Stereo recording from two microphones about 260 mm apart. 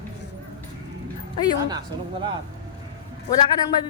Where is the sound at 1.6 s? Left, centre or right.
Centre.